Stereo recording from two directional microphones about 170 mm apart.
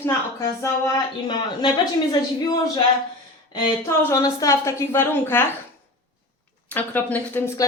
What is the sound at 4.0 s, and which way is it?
A woman's voice, 20° left (ahead or behind).